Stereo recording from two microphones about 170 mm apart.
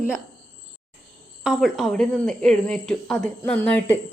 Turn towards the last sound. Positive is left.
turn(degrees=5)  # may be behind; listen again after turning